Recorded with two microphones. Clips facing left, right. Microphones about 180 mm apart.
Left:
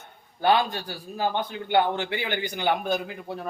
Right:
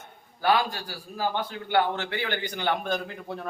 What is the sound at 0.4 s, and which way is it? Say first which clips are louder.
A man's voice: left 2 dB; 25° left (ahead or behind).